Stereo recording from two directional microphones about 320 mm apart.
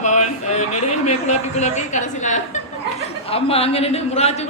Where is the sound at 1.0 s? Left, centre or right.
Left.